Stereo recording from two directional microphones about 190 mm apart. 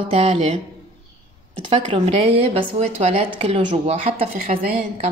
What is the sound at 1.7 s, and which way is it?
A woman's voice, 35° right (ahead or behind).